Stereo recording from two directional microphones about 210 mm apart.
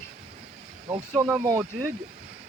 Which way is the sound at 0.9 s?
30° right (ahead or behind).